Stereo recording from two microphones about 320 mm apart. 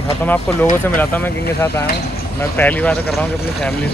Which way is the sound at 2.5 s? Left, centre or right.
Centre.